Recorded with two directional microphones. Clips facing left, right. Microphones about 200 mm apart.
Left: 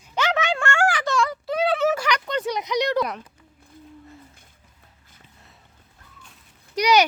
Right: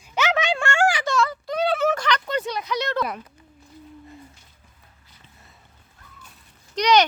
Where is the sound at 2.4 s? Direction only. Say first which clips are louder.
Left 3 dB; 15° left (ahead or behind).